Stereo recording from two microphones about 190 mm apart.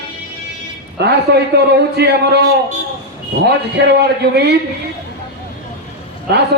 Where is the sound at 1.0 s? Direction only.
60° right (ahead or behind).